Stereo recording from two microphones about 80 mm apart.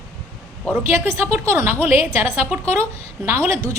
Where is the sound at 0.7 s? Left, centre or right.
Right.